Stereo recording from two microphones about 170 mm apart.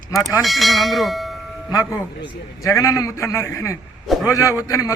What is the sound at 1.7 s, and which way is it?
A man's voice, 20° left (ahead or behind).